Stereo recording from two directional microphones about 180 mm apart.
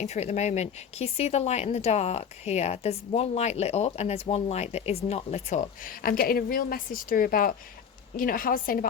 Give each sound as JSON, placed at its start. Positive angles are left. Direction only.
{"t": 0.0, "sound": "a woman's voice", "side_deg": 40}